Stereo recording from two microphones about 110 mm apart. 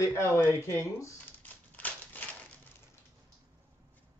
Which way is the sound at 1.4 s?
15° left (ahead or behind).